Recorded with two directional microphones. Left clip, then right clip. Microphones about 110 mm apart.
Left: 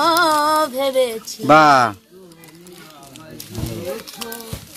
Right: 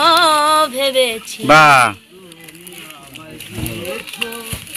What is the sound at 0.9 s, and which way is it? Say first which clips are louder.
Speech: right 3 dB; 45° left (ahead or behind).